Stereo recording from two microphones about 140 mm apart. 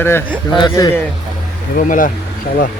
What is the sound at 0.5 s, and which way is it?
Speech, 30° left (ahead or behind).